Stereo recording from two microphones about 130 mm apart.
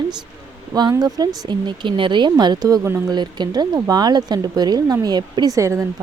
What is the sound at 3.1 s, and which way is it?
Speech, 35° right (ahead or behind).